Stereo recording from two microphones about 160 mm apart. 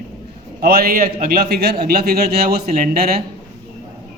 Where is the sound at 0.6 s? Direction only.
70° right (ahead or behind).